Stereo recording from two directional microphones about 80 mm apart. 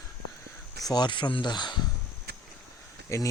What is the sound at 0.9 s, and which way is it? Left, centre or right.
Speech, left.